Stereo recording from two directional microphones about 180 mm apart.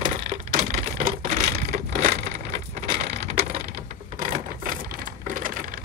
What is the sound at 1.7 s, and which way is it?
Crushing, 50° right (ahead or behind).